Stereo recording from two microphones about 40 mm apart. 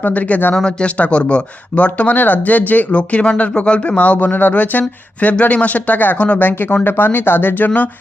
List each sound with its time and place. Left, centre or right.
0.0 s speech: left
0.6 s speech: left
2.1 s speech: left
2.9 s speech: left
3.9 s speech: left
5.3 s speech: left
6.1 s speech: left
6.4 s speech: left